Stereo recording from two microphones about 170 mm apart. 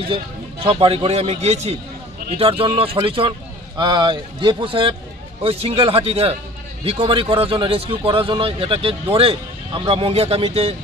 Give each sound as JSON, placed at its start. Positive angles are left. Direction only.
{"t": 0.1, "sound": "a man's voice", "side_deg": -30}